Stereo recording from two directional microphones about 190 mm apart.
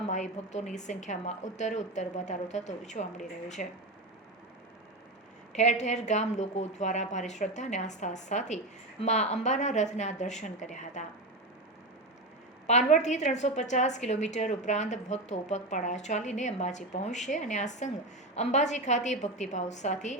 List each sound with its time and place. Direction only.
0.1 s a woman's voice: 40° left (ahead or behind)
5.5 s a woman's voice: 35° left (ahead or behind)
12.6 s a woman's voice: 40° left (ahead or behind)